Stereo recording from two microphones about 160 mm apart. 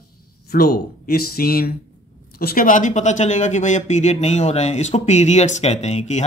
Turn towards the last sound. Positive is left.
turn(degrees=45)  # may be behind; listen again after turning